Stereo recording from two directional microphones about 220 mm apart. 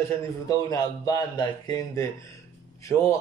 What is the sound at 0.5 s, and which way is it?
Speech, 15° left (ahead or behind).